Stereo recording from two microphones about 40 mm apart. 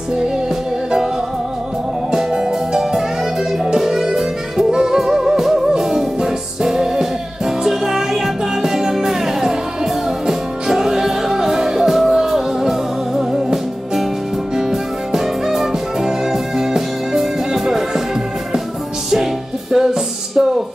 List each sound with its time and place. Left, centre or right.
2.0 s music: centre
19.7 s music: centre